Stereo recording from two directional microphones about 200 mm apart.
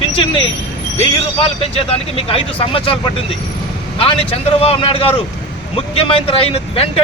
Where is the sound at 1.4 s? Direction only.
30° left (ahead or behind).